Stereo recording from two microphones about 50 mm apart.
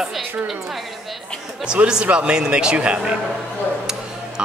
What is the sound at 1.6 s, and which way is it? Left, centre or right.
Speech, centre.